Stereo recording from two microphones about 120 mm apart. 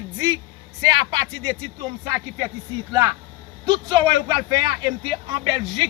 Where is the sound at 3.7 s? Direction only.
40° right (ahead or behind).